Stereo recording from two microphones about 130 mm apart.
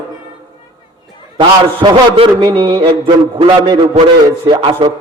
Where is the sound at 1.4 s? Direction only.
35° right (ahead or behind).